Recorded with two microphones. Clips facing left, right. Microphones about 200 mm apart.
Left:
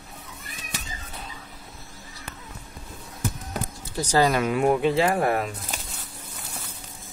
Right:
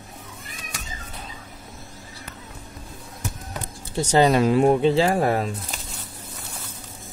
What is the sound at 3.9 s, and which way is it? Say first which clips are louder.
Speech: right 4 dB; 25° right (ahead or behind).